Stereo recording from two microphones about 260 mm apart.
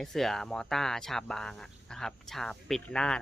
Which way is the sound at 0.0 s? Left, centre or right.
Centre.